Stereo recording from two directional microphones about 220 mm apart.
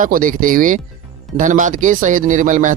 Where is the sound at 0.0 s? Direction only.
40° right (ahead or behind).